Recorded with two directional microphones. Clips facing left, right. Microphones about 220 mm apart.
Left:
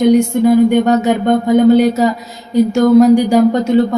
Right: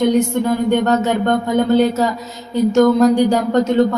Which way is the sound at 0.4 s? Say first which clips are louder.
Left 6 dB; 15° left (ahead or behind).